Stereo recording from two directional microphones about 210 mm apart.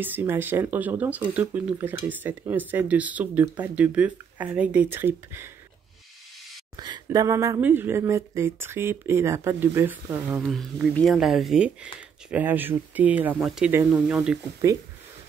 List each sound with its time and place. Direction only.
0.0 s speech: 10° right (ahead or behind)
6.8 s speech: 20° right (ahead or behind)
10.5 s speech: centre (ahead or behind)